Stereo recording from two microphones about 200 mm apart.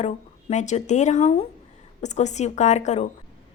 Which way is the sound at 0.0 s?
35° left (ahead or behind).